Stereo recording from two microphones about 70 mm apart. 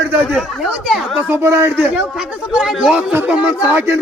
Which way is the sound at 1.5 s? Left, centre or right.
Right.